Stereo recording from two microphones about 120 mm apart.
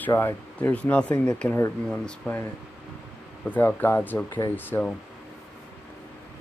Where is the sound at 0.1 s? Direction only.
20° left (ahead or behind).